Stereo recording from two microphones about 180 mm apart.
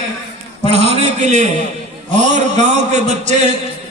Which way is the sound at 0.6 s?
35° right (ahead or behind).